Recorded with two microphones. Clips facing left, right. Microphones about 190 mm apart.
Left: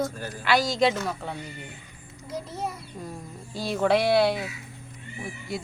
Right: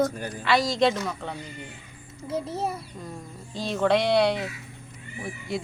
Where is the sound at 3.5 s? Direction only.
10° left (ahead or behind).